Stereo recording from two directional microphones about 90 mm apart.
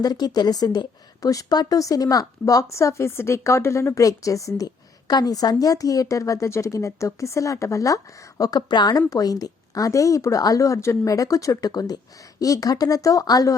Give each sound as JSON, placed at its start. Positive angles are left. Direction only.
{"t": 0.0, "sound": "a woman's voice", "side_deg": 50}